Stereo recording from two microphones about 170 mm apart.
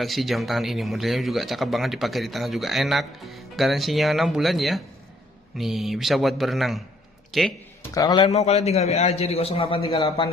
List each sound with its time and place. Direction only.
0.0 s a man's voice: centre (ahead or behind)
7.9 s a man's voice: 20° left (ahead or behind)
8.3 s a man's voice: 40° left (ahead or behind)